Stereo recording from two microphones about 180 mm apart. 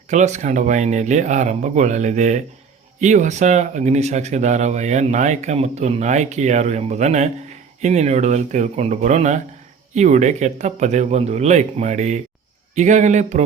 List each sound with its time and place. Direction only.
0.1 s speech: 40° right (ahead or behind)